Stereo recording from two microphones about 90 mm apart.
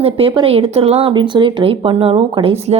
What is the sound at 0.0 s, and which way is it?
Speech, 85° right.